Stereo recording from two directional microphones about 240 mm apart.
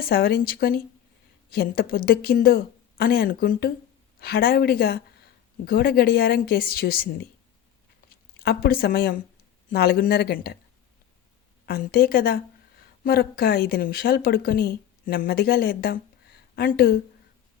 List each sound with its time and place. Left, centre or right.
0.0 s speech: left
8.4 s speech: left
11.6 s speech: left